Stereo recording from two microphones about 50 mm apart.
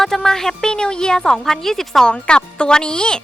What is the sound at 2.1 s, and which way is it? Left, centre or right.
A woman's voice, centre.